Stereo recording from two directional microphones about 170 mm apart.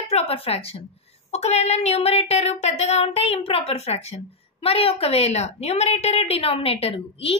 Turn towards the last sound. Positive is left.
turn(degrees=35)  # may be behind; listen again after turning